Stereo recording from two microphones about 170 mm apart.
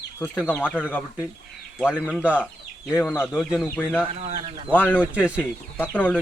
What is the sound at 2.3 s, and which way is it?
Chicken, 10° left (ahead or behind).